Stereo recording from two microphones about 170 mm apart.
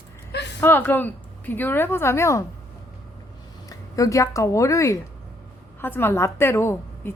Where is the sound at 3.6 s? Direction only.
20° left (ahead or behind).